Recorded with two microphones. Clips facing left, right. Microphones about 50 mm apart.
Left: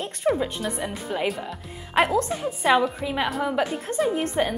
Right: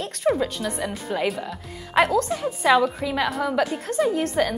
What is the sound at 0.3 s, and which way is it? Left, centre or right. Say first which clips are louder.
Speech: right 1 dB; centre.